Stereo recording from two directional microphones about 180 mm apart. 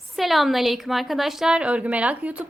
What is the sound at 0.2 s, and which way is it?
A woman's voice, centre (ahead or behind).